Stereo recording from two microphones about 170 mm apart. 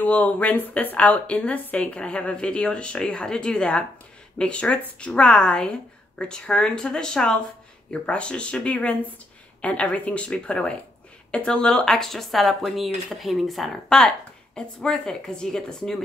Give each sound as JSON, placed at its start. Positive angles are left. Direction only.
{"t": 0.0, "sound": "a woman's voice", "side_deg": 10}